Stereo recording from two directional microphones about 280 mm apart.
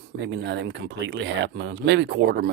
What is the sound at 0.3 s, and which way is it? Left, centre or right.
Speech, right.